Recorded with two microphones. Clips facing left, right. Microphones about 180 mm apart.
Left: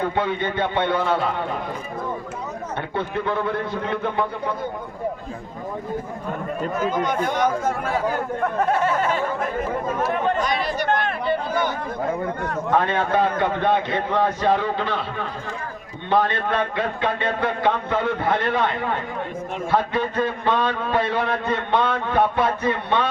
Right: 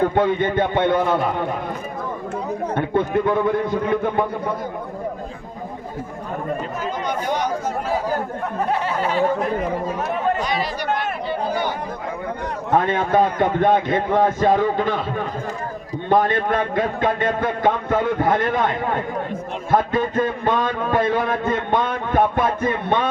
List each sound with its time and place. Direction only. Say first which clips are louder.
0.1 s a man's voice: right 5 dB; 50° right (ahead or behind)
2.7 s a man's voice: right 7 dB; 50° right (ahead or behind)
6.9 s speech: left 1 dB; 50° left (ahead or behind)
11.3 s chatter: left 1 dB; 50° left (ahead or behind)
12.7 s a man's voice: right 3 dB; 50° right (ahead or behind)
16.0 s a man's voice: right 3 dB; 45° right (ahead or behind)
19.7 s a man's voice: right 3 dB; 45° right (ahead or behind)